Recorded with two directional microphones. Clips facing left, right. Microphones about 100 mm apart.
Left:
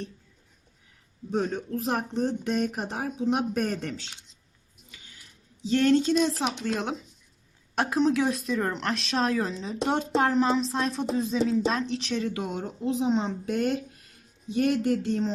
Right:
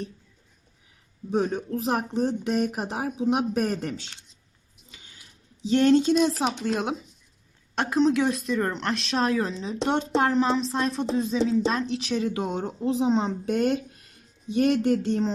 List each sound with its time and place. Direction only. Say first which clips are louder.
1.3 s speech: right 3 dB; 10° right (ahead or behind)
5.6 s speech: right 3 dB; 20° right (ahead or behind)
7.8 s speech: right 2 dB; centre (ahead or behind)
12.3 s speech: right 3 dB; 25° right (ahead or behind)